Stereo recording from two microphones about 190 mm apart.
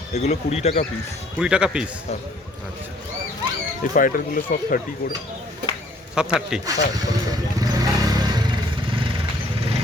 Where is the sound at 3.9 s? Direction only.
45° left (ahead or behind).